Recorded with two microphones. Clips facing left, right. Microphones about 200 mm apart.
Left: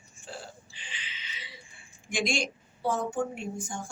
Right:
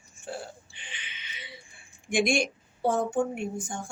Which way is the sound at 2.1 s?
55° right (ahead or behind).